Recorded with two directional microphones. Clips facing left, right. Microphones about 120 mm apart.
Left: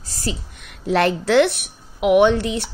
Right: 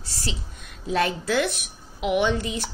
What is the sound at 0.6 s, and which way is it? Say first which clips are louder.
A woman's voice: left 5 dB; 70° left (ahead or behind).